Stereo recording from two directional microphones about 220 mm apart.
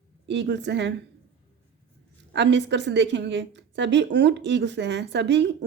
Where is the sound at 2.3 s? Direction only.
50° right (ahead or behind).